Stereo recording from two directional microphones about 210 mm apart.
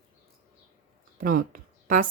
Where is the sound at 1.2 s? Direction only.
40° right (ahead or behind).